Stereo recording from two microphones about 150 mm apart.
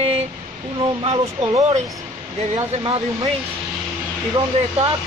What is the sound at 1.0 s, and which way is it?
Speech, 40° right (ahead or behind).